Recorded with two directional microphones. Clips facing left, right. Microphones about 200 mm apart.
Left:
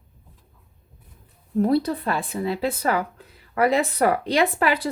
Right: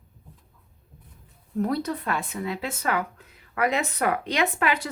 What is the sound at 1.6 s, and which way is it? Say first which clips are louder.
Speech: left 6 dB; 30° left (ahead or behind).